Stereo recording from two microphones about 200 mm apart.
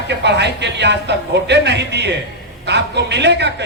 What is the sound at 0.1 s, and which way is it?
Speech, 60° right (ahead or behind).